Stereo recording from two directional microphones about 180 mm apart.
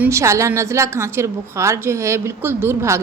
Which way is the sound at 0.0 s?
15° right (ahead or behind).